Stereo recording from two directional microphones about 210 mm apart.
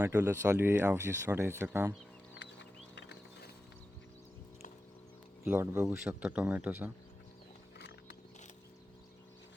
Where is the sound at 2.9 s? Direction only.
55° left (ahead or behind).